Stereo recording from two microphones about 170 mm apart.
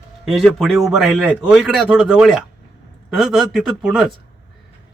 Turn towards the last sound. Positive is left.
turn(degrees=-5)  # may be behind; listen again after turning